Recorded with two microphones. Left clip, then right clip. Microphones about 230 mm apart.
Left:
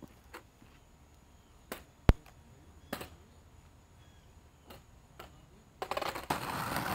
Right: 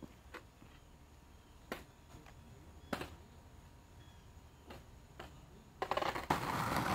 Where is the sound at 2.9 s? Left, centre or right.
Left.